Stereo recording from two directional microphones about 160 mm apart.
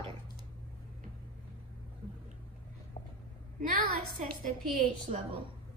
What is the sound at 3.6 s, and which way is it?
Speech, 60° right (ahead or behind).